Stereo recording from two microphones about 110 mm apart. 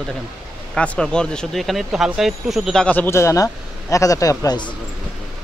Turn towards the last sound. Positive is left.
turn(degrees=30)  # may be behind; listen again after turning